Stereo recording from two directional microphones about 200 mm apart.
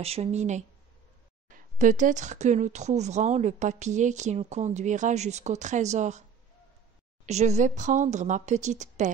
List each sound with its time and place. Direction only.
0.0 s speech: 30° right (ahead or behind)
7.2 s speech: 35° right (ahead or behind)